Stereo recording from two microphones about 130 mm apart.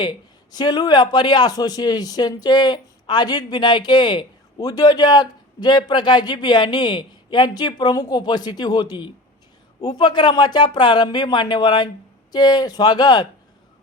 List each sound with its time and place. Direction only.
0.0 s a man's voice: 35° left (ahead or behind)